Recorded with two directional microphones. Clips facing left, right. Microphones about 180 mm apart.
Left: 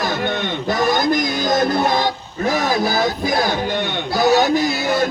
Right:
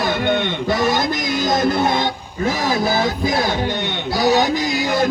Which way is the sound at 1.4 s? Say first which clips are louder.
Right 1 dB; 25° right (ahead or behind).